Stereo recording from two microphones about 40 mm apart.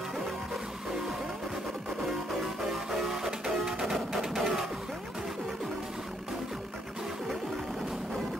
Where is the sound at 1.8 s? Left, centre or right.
Centre.